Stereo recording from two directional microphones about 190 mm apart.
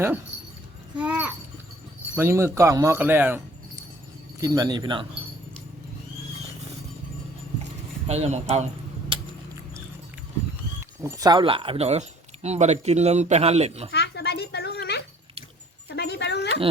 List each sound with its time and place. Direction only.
0.9 s a child's voice: 10° right (ahead or behind); by 5.0 s 25° right (ahead or behind)
8.0 s speech: 35° right (ahead or behind)
10.8 s speech: 15° right (ahead or behind); by 13.9 s 30° right (ahead or behind)
13.9 s a sound: 60° left (ahead or behind)
16.0 s dog: 60° left (ahead or behind)